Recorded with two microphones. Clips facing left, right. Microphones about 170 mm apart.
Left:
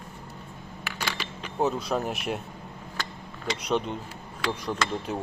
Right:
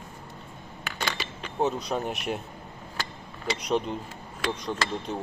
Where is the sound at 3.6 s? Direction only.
Centre (ahead or behind).